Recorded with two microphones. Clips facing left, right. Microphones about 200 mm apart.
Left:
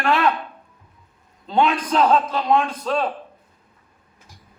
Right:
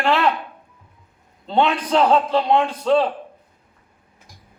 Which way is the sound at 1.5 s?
30° right (ahead or behind).